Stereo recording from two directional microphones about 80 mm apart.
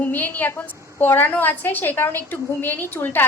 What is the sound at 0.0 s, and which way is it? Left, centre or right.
A woman's voice, left.